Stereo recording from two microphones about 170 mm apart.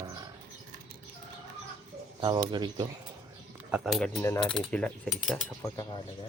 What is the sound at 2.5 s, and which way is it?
Speech, 25° right (ahead or behind).